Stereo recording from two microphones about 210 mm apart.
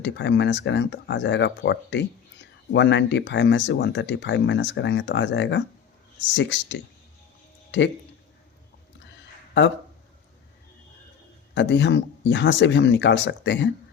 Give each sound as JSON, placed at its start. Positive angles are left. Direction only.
{"t": 0.0, "sound": "speech", "side_deg": 55}
{"t": 9.6, "sound": "speech", "side_deg": 55}
{"t": 11.5, "sound": "speech", "side_deg": 60}